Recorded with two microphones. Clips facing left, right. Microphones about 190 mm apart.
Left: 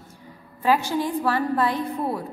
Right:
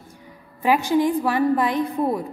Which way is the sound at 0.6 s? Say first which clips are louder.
Right 3 dB; 15° right (ahead or behind).